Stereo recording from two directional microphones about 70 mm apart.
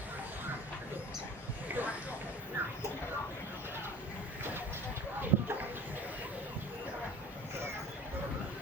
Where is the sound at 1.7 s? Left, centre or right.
Right.